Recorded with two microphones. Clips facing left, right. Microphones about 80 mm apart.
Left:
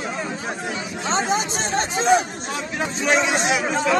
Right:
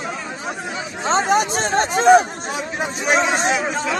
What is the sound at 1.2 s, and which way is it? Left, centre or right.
Speech, right.